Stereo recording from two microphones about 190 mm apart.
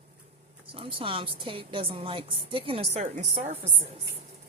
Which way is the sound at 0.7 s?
30° right (ahead or behind).